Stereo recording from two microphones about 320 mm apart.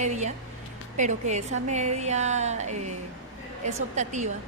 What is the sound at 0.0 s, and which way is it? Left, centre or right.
A woman's voice, right.